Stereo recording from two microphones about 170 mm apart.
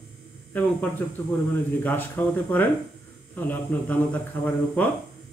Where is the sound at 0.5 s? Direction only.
10° left (ahead or behind).